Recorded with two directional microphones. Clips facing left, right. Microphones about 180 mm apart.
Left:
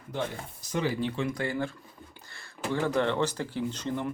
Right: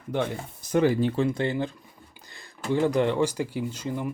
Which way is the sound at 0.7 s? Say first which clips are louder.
Right 7 dB; 50° right (ahead or behind).